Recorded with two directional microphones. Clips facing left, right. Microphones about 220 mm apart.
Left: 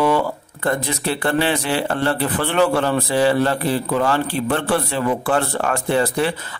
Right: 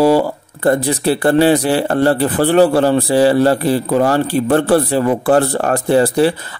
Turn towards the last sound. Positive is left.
turn(degrees=-35)  # may be behind; listen again after turning